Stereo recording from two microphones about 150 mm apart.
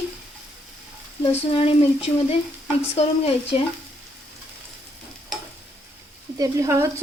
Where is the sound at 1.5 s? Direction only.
40° left (ahead or behind).